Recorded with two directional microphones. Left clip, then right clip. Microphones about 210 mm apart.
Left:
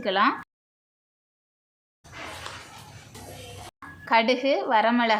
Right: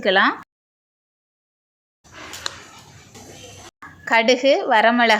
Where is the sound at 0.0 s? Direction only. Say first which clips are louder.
Right 6 dB; 15° right (ahead or behind).